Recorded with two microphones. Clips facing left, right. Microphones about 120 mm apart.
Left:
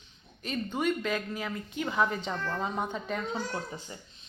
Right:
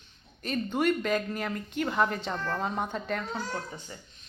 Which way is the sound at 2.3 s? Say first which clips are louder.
Right 1 dB; 10° right (ahead or behind).